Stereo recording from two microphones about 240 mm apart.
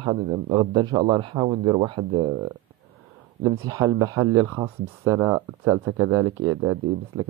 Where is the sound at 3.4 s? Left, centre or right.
Centre.